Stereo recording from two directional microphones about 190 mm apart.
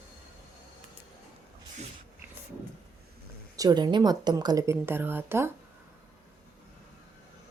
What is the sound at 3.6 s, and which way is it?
A woman's voice, 20° right (ahead or behind).